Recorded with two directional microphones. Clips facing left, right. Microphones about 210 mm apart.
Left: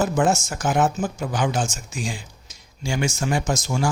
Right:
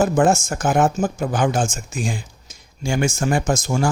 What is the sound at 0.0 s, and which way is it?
Speech, 50° right (ahead or behind).